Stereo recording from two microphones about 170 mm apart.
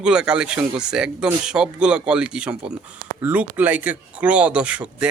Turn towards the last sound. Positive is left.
turn(degrees=-5)  # may be behind; listen again after turning